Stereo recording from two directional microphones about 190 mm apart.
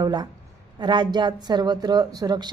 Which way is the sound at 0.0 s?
25° right (ahead or behind).